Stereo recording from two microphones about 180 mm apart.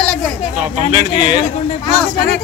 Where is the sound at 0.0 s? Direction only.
Centre (ahead or behind).